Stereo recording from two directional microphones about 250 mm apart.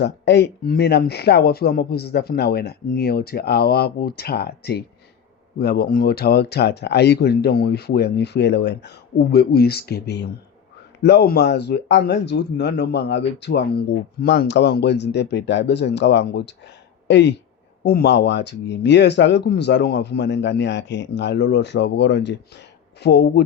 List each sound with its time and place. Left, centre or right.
0.0 s speech: left